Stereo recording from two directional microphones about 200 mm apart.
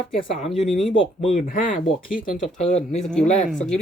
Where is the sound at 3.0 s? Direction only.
5° left (ahead or behind).